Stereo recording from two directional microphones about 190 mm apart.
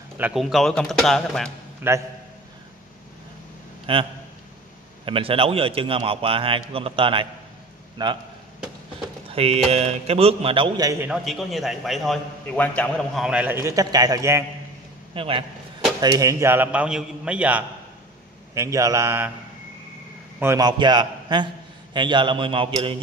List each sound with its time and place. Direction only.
0.2 s a man's voice: centre (ahead or behind)
1.8 s a man's voice: 10° right (ahead or behind)
3.8 s a man's voice: 25° right (ahead or behind)
9.3 s a man's voice: 30° right (ahead or behind)
11.1 s a man's voice: centre (ahead or behind); by 14.4 s 15° right (ahead or behind)
15.1 s a man's voice: 30° right (ahead or behind); by 19.3 s 15° right (ahead or behind)
20.3 s a man's voice: 15° right (ahead or behind)